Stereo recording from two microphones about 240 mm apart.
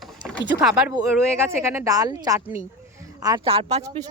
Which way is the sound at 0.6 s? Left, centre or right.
Centre.